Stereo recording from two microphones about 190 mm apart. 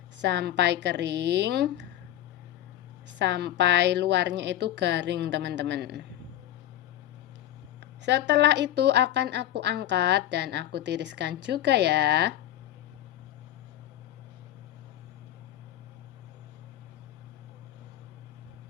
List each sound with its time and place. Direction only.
0.2 s a woman's voice: 65° right (ahead or behind)
3.1 s a woman's voice: 65° right (ahead or behind)
7.8 s a woman's voice: 70° right (ahead or behind)